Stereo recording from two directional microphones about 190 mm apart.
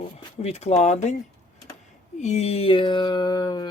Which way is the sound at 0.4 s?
35° left (ahead or behind).